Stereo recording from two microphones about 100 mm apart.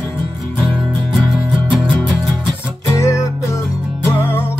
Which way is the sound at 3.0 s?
30° left (ahead or behind).